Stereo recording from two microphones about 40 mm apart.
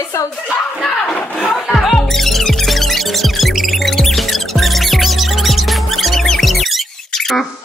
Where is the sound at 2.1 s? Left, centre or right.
Centre.